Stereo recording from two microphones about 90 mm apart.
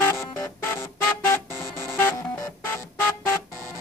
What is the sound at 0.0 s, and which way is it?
Music, 30° left (ahead or behind).